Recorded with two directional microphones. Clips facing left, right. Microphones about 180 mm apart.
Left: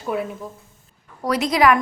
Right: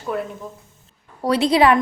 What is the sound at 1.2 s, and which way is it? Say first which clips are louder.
Speech: right 2 dB; 30° right (ahead or behind).